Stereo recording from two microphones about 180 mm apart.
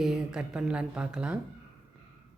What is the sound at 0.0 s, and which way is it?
A woman's voice, centre (ahead or behind).